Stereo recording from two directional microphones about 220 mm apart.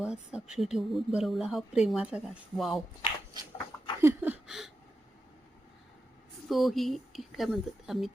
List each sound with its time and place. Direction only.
0.0 s speech: 5° right (ahead or behind)
3.3 s dog: 20° right (ahead or behind)
4.0 s speech: 10° right (ahead or behind)
6.5 s speech: centre (ahead or behind)